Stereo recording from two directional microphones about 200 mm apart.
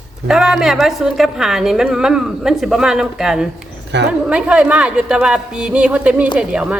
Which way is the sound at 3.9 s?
60° right (ahead or behind).